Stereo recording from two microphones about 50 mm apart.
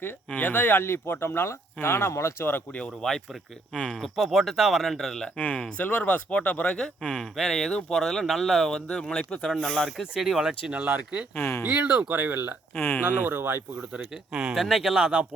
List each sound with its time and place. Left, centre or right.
0.3 s speech: left
3.0 s speech: centre
4.0 s speech: centre
5.4 s speech: left
6.7 s speech: centre
8.9 s speech: centre
9.1 s speech: centre
10.2 s speech: centre
10.7 s speech: right
11.3 s speech: left
11.6 s speech: right
13.9 s speech: centre
14.5 s speech: centre
14.9 s speech: centre